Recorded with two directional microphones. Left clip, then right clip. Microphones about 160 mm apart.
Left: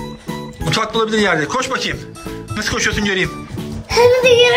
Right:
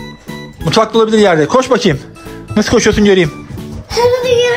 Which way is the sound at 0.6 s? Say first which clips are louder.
Right 7 dB; 25° right (ahead or behind).